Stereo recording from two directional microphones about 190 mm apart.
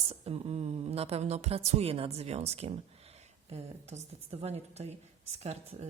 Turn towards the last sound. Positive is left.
turn(degrees=-35)  # may be behind; listen again after turning